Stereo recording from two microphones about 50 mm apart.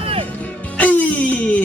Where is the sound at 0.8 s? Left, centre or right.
Left.